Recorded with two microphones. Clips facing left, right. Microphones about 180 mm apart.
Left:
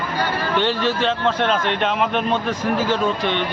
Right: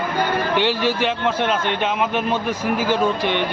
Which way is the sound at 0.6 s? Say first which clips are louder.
Left 2 dB; 10° right (ahead or behind).